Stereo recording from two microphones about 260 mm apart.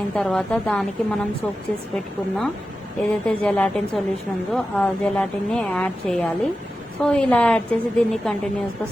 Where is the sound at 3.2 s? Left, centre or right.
Centre.